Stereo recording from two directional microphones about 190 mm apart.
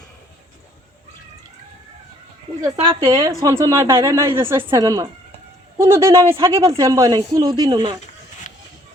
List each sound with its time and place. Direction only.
2.7 s speech: 30° right (ahead or behind)
3.0 s speech: 15° right (ahead or behind)